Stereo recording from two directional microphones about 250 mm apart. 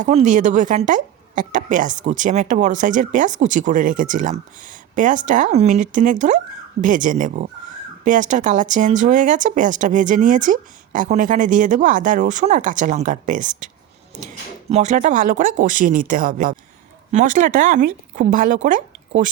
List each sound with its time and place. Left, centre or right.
0.0 s a woman's voice: right
14.7 s a woman's voice: right